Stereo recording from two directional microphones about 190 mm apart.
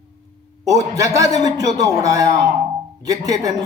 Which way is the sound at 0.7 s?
15° right (ahead or behind).